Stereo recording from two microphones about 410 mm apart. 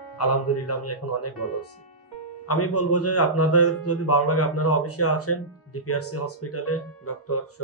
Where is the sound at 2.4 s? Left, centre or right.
Left.